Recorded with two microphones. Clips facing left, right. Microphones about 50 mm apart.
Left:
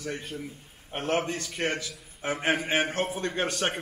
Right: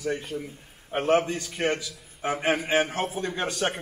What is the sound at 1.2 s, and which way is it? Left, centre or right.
A man's voice, centre.